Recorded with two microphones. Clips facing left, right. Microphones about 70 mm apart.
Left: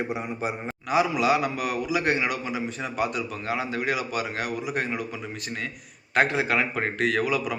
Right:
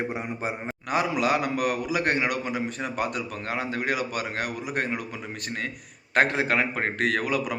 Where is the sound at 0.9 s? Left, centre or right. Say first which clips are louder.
Left 2 dB; right.